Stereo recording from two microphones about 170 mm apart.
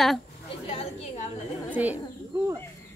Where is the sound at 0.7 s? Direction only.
40° left (ahead or behind).